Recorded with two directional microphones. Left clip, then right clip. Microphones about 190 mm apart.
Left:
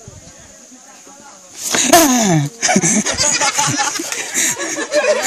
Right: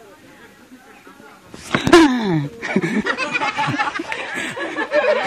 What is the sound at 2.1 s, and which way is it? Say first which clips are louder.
Speech: left 6 dB; 65° left (ahead or behind).